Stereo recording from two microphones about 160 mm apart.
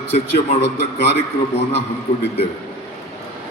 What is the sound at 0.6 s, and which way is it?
Speech, 90° left.